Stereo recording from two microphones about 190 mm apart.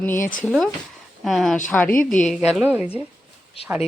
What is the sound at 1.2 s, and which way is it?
Speech, centre (ahead or behind).